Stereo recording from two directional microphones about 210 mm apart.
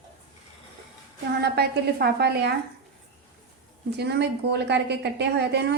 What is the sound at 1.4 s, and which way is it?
A woman's voice, 50° right (ahead or behind).